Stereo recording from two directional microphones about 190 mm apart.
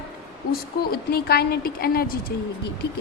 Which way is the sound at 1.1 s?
55° left (ahead or behind).